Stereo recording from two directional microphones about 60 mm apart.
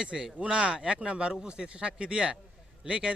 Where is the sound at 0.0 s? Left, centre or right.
Centre.